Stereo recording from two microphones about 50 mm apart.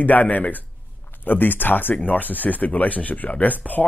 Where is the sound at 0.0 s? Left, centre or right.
Left.